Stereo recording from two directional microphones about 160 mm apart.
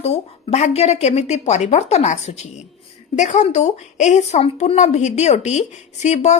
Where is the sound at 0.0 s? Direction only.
40° left (ahead or behind).